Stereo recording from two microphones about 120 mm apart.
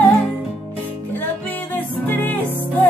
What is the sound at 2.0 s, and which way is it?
Music, 15° left (ahead or behind).